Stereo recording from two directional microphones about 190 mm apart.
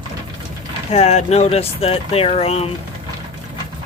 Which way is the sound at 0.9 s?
35° left (ahead or behind).